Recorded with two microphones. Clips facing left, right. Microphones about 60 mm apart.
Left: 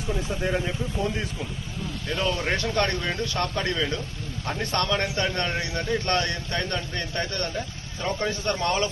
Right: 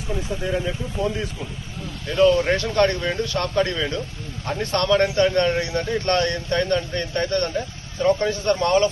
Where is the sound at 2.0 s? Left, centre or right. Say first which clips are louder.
Right 10 dB; centre.